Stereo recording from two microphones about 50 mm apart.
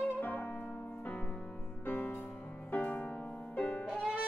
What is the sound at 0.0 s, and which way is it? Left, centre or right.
Music, left.